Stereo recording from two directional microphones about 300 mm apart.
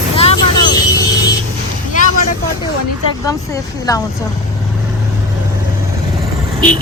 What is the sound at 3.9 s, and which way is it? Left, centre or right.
Speech, centre.